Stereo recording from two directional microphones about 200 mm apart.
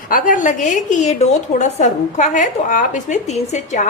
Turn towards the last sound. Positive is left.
turn(degrees=35)  # may be behind; listen again after turning